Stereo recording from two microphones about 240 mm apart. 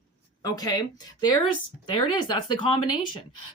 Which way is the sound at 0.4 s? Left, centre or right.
Centre.